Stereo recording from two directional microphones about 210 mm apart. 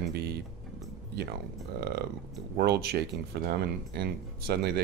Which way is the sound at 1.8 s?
50° right (ahead or behind).